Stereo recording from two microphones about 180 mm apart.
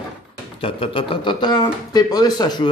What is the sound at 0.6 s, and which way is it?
Speech, 30° left (ahead or behind).